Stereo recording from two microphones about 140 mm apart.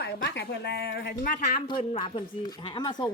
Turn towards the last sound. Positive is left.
turn(degrees=30)  # may be behind; listen again after turning